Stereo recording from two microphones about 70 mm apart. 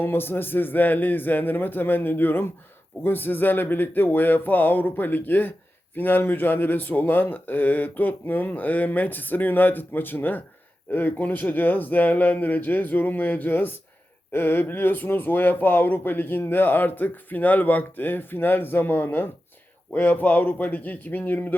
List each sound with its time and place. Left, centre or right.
0.0 s speech: left